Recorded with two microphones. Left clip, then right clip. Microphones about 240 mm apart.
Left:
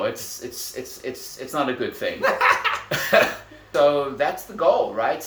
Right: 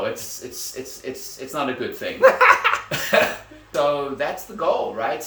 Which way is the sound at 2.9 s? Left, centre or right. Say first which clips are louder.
Left 4 dB; centre.